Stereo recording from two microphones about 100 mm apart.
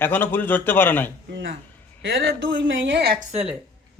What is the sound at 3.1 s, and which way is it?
Speech, 90° right.